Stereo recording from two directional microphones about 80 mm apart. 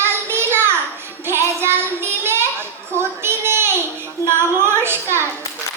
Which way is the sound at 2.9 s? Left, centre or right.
Right.